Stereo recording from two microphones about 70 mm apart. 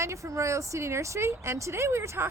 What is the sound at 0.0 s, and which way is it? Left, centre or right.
A woman's voice, right.